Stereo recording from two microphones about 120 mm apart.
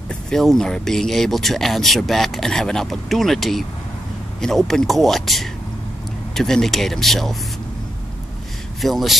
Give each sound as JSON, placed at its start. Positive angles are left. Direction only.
{"t": 0.1, "sound": "speech", "side_deg": 5}
{"t": 8.8, "sound": "speech", "side_deg": 0}